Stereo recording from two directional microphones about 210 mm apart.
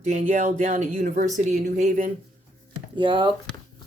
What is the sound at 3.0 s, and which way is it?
Speech, 20° right (ahead or behind).